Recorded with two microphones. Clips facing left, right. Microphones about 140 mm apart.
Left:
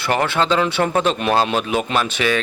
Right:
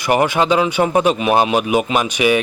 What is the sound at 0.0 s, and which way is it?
Speech, 15° right (ahead or behind).